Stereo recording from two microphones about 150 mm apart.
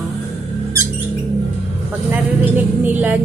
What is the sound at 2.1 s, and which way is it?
A woman's voice, 10° right (ahead or behind).